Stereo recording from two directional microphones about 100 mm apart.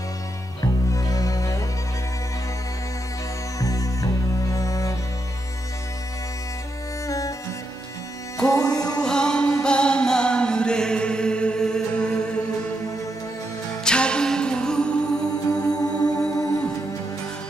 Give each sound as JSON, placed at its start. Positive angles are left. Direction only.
{"t": 0.9, "sound": "music", "side_deg": 35}
{"t": 3.5, "sound": "music", "side_deg": 35}
{"t": 7.1, "sound": "music", "side_deg": 35}
{"t": 8.4, "sound": "music", "side_deg": 10}
{"t": 13.8, "sound": "music", "side_deg": 10}
{"t": 15.8, "sound": "music", "side_deg": 35}